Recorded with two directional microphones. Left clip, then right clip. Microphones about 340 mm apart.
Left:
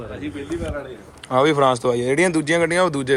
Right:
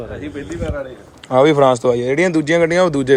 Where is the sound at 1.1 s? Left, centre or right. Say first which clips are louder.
Right 5 dB; centre.